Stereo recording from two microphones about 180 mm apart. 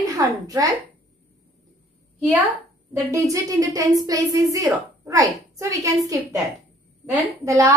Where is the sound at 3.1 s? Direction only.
20° right (ahead or behind).